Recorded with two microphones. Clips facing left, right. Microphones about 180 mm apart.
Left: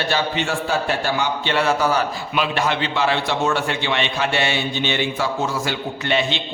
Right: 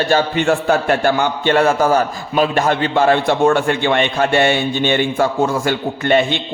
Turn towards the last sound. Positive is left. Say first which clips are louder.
# right 6 dB
turn(degrees=-50)  # may be behind; listen again after turning